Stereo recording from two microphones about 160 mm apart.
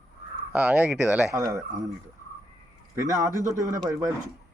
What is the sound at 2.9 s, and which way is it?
Speech, 20° right (ahead or behind).